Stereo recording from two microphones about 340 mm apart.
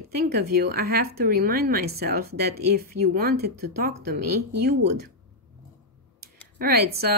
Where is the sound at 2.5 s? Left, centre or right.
Right.